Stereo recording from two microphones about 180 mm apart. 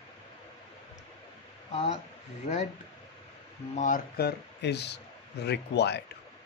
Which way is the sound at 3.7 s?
45° left (ahead or behind).